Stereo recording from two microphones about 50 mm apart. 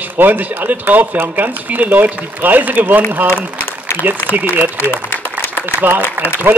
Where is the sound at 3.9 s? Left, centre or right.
Left.